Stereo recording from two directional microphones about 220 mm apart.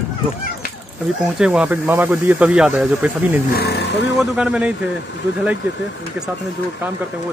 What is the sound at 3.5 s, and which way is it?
Speech, 50° left (ahead or behind).